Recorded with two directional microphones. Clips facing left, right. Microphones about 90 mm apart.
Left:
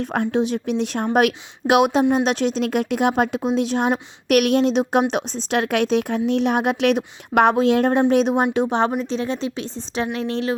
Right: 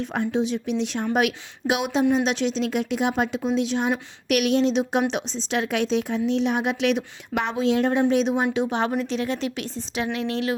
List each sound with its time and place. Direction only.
0.0 s speech: 55° left (ahead or behind)
8.6 s speech: 35° left (ahead or behind)